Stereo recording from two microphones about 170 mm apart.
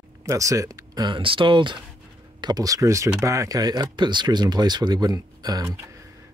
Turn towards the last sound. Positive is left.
turn(degrees=-20)  # may be behind; listen again after turning